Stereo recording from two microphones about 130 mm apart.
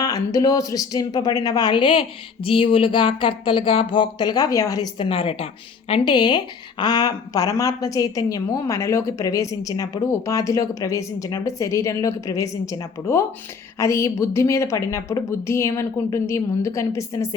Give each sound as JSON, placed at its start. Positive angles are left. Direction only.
{"t": 0.0, "sound": "speech", "side_deg": 30}
{"t": 5.0, "sound": "speech", "side_deg": 45}
{"t": 5.9, "sound": "a woman's voice", "side_deg": 35}